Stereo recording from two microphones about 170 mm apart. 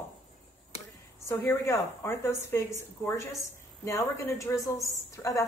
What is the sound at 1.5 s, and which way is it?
A woman's voice, 15° left (ahead or behind).